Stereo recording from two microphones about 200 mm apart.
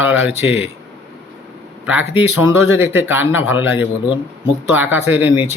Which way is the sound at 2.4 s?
90° left.